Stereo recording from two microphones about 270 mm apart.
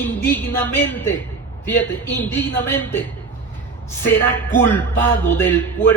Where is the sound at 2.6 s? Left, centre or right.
Centre.